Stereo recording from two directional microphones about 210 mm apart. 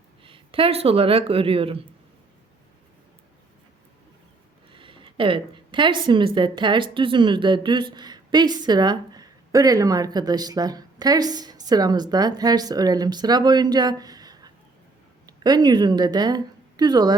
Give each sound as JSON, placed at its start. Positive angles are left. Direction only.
{"t": 0.3, "sound": "a woman's voice", "side_deg": -25}
{"t": 4.7, "sound": "a woman's voice", "side_deg": -25}